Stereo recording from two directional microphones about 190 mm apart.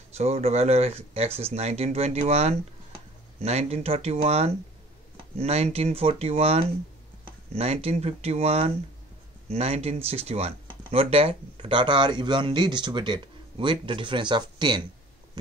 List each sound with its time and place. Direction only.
0.2 s speech: 35° right (ahead or behind)